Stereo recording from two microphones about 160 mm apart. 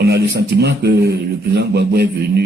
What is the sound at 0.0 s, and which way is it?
Speech, 90° right.